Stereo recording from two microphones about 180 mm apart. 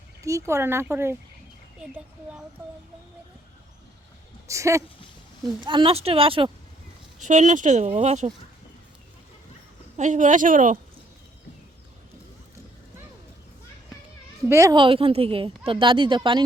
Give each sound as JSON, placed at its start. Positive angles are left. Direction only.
{"t": 0.2, "sound": "speech", "side_deg": -15}
{"t": 4.4, "sound": "a woman's voice", "side_deg": -15}
{"t": 7.2, "sound": "speech", "side_deg": -45}
{"t": 10.0, "sound": "a woman's voice", "side_deg": -45}
{"t": 14.4, "sound": "a woman's voice", "side_deg": -15}